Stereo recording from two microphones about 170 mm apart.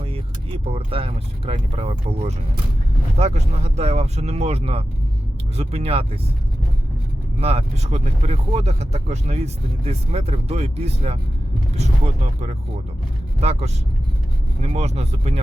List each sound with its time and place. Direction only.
0.0 s speech: 35° right (ahead or behind)
7.3 s speech: 35° right (ahead or behind)